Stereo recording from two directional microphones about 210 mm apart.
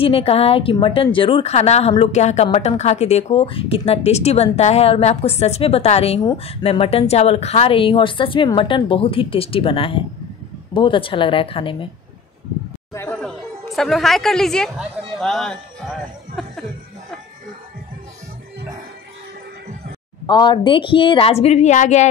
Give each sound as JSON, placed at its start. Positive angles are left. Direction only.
{"t": 0.0, "sound": "a woman's voice", "side_deg": 25}
{"t": 12.9, "sound": "speech", "side_deg": 10}
{"t": 16.4, "sound": "chuckle", "side_deg": 0}
{"t": 20.2, "sound": "a woman's voice", "side_deg": 20}